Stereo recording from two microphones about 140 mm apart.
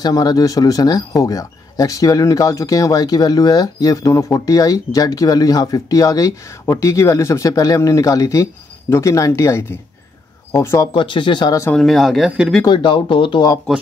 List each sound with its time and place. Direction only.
0.0 s speech: 25° left (ahead or behind)
10.9 s speech: 35° left (ahead or behind)
11.7 s speech: centre (ahead or behind)
12.6 s speech: 35° left (ahead or behind)